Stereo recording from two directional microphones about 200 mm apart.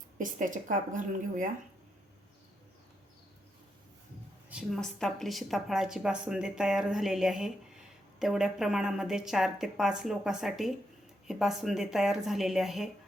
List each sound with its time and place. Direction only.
0.2 s a woman's voice: 40° right (ahead or behind)
4.4 s a woman's voice: centre (ahead or behind)